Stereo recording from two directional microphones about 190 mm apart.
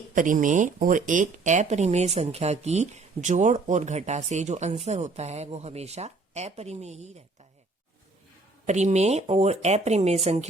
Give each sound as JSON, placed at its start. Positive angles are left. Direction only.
{"t": 0.1, "sound": "speech", "side_deg": -45}
{"t": 8.6, "sound": "speech", "side_deg": -35}